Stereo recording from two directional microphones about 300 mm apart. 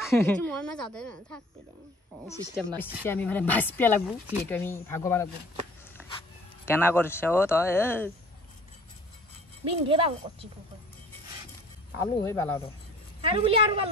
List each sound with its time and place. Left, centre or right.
0.0 s a woman's voice: centre
9.7 s speech: centre
12.0 s speech: centre
13.2 s speech: centre